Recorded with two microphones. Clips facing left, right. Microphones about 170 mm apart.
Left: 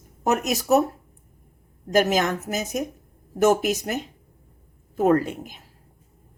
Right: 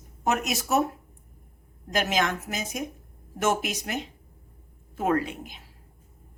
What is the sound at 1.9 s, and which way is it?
A woman's voice, 45° left (ahead or behind).